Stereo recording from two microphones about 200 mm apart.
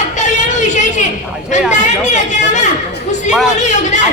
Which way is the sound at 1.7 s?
35° left (ahead or behind).